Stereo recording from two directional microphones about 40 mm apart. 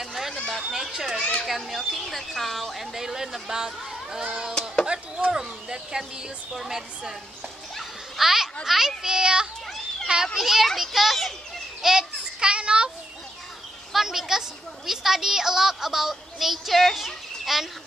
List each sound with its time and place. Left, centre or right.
0.0 s chatter: centre
0.6 s a woman's voice: centre; by 5.3 s right
5.3 s a woman's voice: centre
8.2 s a sound: centre
8.6 s a woman's voice: centre
10.2 s speech: centre
11.8 s children playing: centre
12.4 s a sound: right
13.9 s a woman's voice: centre